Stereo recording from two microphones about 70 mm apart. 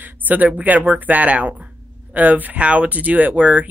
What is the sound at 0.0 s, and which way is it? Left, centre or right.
Speech, right.